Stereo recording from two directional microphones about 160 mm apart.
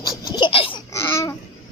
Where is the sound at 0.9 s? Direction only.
15° left (ahead or behind).